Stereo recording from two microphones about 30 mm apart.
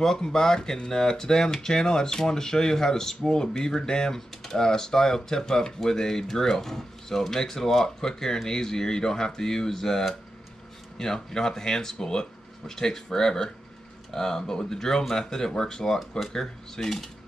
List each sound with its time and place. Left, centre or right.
0.0 s speech: centre